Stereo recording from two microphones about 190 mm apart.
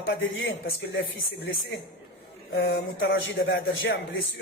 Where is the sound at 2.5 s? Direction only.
75° left (ahead or behind).